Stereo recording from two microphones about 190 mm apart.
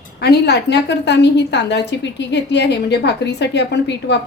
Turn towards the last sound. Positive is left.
turn(degrees=65)  # may be behind; listen again after turning